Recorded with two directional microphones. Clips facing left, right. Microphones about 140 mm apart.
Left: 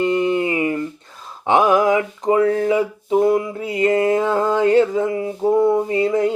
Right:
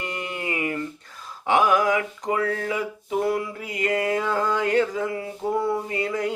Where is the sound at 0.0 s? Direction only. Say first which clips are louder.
Left 13 dB; 25° left (ahead or behind).